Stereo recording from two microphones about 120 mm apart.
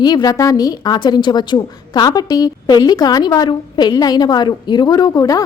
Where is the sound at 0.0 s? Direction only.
35° left (ahead or behind).